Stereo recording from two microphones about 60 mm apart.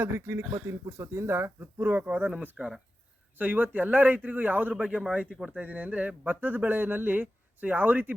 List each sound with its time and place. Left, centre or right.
0.0 s speech: right
2.6 s speech: centre
3.3 s speech: right